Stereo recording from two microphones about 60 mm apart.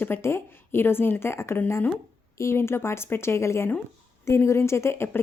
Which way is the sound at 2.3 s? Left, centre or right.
Left.